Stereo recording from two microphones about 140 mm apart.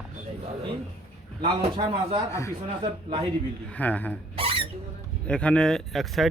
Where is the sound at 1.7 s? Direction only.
40° right (ahead or behind).